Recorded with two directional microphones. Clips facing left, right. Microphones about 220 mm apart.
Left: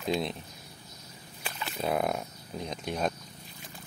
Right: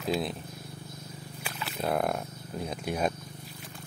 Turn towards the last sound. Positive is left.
turn(degrees=-5)  # may be behind; listen again after turning